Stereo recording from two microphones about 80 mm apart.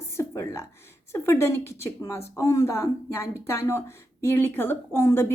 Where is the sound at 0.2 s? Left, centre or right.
Left.